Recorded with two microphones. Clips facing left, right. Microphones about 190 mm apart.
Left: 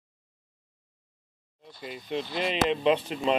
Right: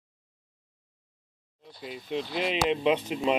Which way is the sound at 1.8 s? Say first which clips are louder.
Even; centre (ahead or behind).